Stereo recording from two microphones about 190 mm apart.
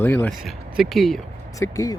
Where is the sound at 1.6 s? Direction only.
15° left (ahead or behind).